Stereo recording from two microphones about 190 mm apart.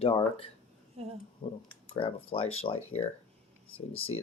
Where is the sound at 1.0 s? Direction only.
30° right (ahead or behind).